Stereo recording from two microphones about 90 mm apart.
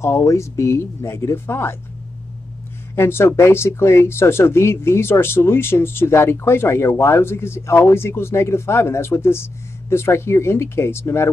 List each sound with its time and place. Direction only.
0.0 s speech: 30° left (ahead or behind)
3.0 s speech: 25° left (ahead or behind)